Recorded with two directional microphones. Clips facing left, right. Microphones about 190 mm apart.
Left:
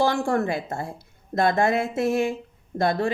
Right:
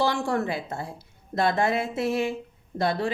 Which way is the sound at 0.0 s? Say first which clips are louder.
Left 3 dB; 50° left (ahead or behind).